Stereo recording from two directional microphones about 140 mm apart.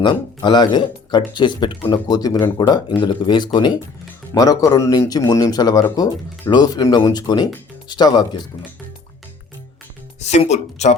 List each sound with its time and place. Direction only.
0.0 s speech: 30° left (ahead or behind)
10.2 s speech: 55° left (ahead or behind)